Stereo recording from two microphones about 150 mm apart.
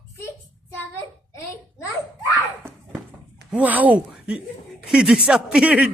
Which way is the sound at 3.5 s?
10° right (ahead or behind).